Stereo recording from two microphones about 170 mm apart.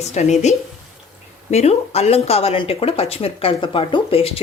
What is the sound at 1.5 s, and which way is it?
A woman's voice, 40° left (ahead or behind).